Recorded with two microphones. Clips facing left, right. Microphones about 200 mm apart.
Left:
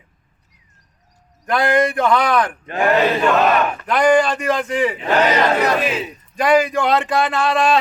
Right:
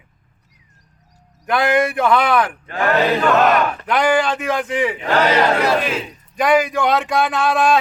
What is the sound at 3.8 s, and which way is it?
Speech, 5° right (ahead or behind).